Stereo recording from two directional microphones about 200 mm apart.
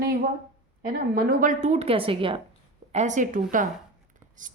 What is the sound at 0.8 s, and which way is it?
A woman's voice, 50° right (ahead or behind).